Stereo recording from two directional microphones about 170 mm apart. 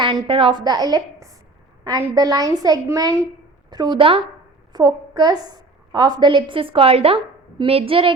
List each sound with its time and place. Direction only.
0.0 s a woman's voice: 25° right (ahead or behind)